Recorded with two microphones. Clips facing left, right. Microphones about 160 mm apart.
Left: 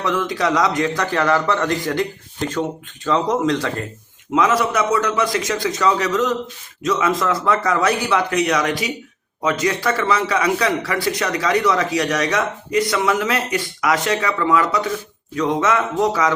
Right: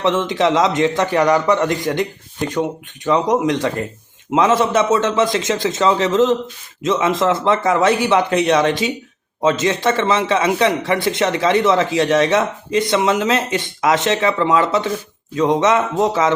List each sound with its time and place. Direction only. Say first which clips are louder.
0.0 s a man's voice: right 4 dB; 25° right (ahead or behind)